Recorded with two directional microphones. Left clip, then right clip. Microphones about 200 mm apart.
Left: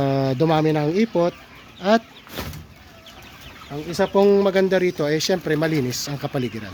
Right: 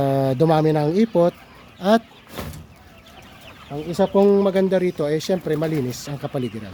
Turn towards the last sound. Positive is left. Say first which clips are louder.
# left 1 dB
turn(degrees=-5)  # may be behind; listen again after turning